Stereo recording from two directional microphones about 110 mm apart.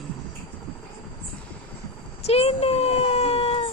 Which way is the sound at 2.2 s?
70° left (ahead or behind).